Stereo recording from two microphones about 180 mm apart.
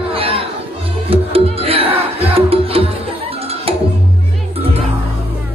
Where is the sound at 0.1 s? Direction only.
30° right (ahead or behind).